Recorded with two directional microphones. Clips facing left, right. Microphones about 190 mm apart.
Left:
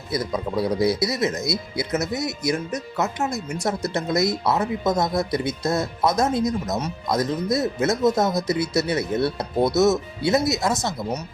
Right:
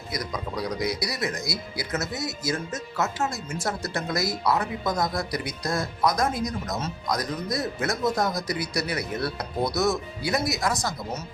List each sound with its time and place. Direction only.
0.1 s speech: 25° left (ahead or behind)